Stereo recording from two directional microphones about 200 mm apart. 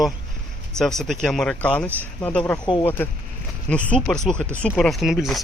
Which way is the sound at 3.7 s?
5° left (ahead or behind).